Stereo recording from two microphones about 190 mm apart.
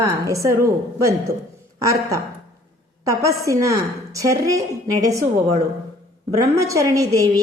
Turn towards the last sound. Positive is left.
turn(degrees=-20)  # may be behind; listen again after turning